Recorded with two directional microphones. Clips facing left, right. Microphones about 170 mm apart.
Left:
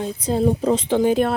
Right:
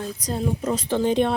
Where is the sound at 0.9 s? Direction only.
10° left (ahead or behind).